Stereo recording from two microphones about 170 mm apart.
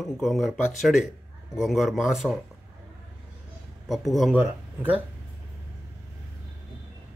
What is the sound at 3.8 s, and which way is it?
A man's voice, centre (ahead or behind).